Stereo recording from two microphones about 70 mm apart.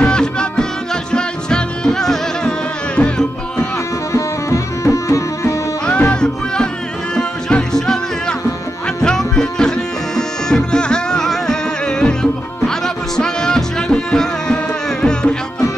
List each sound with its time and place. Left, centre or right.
0.0 s music: centre
3.7 s music: left
5.9 s music: centre